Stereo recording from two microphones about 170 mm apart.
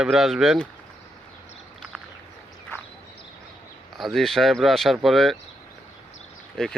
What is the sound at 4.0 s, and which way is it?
Speech, centre (ahead or behind).